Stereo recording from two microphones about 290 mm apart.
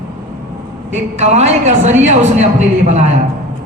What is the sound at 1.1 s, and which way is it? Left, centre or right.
A man's voice, right.